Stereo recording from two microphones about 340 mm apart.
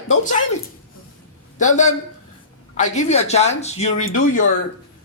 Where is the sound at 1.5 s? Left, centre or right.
Left.